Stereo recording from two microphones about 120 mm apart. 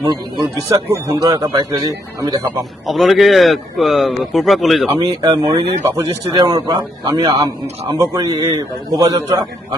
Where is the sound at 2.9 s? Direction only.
Centre (ahead or behind).